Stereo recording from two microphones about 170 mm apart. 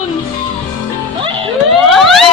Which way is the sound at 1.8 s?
Centre (ahead or behind).